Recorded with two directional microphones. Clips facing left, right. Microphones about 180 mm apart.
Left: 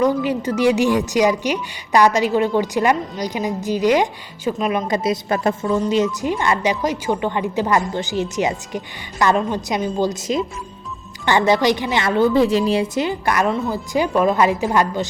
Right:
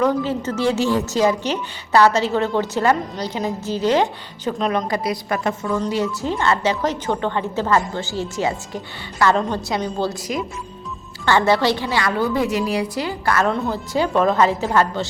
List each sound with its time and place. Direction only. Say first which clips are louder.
0.0 s a woman's voice: left 1 dB; 15° left (ahead or behind)
4.9 s a woman's voice: left 3 dB; 25° left (ahead or behind)
5.8 s a woman's voice: left 3 dB; 20° left (ahead or behind)
13.5 s a woman's voice: left 1 dB; centre (ahead or behind)